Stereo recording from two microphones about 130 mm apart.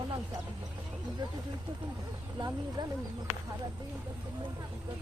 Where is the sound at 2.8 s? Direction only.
35° right (ahead or behind).